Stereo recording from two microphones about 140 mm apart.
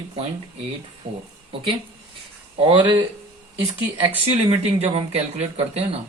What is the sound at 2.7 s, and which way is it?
Speech, 35° right (ahead or behind).